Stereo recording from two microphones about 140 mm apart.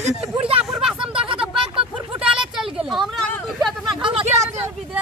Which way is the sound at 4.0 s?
35° right (ahead or behind).